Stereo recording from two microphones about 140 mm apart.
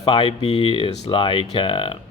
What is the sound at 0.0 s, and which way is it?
Speech, 40° left (ahead or behind).